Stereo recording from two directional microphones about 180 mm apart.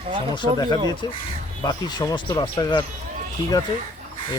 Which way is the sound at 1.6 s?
20° left (ahead or behind).